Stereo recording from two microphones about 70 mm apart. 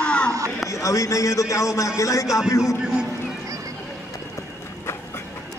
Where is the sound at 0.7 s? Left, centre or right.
Left.